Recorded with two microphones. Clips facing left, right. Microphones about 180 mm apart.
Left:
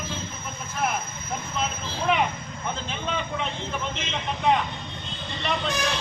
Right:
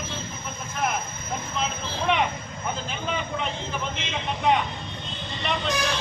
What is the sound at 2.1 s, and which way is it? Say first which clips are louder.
Speech: left 1 dB; 5° left (ahead or behind).